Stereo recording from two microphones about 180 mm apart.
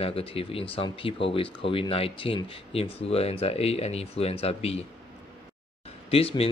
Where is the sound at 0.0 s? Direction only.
30° left (ahead or behind).